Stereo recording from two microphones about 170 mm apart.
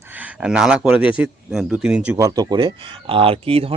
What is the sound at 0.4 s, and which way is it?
Speech, 5° right (ahead or behind).